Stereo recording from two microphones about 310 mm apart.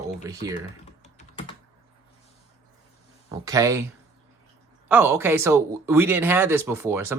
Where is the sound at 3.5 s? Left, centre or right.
Centre.